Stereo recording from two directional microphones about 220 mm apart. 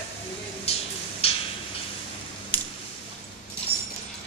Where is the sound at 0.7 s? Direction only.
25° left (ahead or behind).